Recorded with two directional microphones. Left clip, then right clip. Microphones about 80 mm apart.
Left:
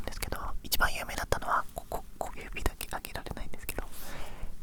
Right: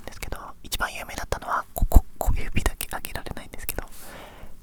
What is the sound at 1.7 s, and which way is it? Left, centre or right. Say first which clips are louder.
Whispering: right 8 dB; right.